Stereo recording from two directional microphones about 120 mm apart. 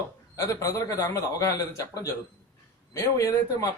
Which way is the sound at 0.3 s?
25° left (ahead or behind).